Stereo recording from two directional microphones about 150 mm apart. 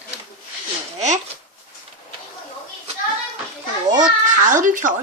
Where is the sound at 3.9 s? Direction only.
60° right (ahead or behind).